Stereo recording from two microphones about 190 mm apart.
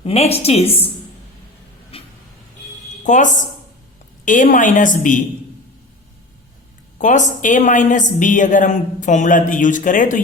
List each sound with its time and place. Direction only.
0.0 s a woman's voice: 35° left (ahead or behind)
1.9 s vehicle: 30° left (ahead or behind)
3.0 s a woman's voice: 40° left (ahead or behind)
7.0 s a woman's voice: 40° left (ahead or behind)